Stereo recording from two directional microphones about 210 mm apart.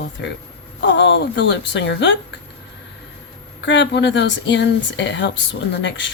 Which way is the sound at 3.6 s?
60° left (ahead or behind).